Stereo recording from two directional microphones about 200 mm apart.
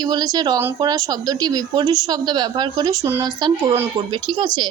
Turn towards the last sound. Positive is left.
turn(degrees=-20)  # may be behind; listen again after turning